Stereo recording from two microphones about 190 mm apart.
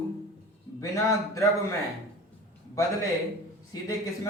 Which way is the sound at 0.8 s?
15° left (ahead or behind).